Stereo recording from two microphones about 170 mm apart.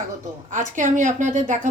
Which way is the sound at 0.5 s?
50° right (ahead or behind).